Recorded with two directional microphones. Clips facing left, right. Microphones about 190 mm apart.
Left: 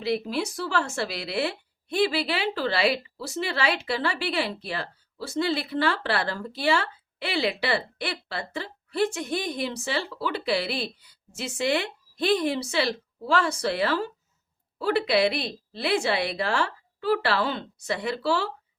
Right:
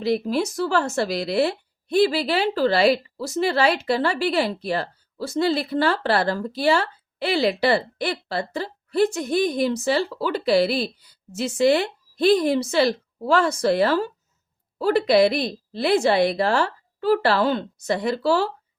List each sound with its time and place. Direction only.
0.0 s a woman's voice: 40° right (ahead or behind)